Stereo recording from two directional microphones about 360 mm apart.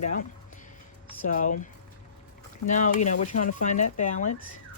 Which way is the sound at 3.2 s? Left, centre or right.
Left.